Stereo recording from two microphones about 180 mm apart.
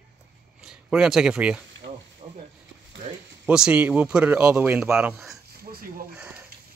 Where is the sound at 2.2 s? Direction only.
30° right (ahead or behind).